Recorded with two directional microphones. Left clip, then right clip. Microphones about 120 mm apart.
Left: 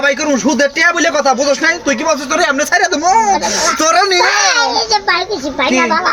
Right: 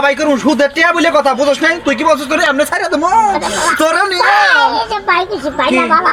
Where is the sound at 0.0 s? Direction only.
10° left (ahead or behind).